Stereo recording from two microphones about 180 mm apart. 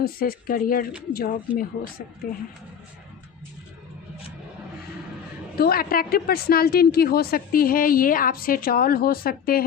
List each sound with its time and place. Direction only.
0.0 s a woman's voice: 55° left (ahead or behind)
5.5 s a woman's voice: 55° left (ahead or behind)